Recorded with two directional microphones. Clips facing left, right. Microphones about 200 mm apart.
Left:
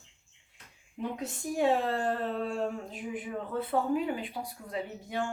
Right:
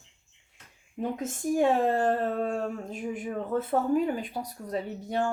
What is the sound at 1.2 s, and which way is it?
Speech, 45° right (ahead or behind).